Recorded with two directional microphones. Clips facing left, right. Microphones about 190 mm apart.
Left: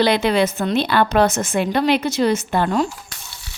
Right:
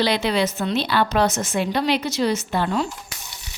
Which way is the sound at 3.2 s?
15° right (ahead or behind).